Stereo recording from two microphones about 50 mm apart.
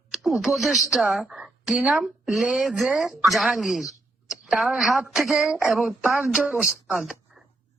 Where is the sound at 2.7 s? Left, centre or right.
Centre.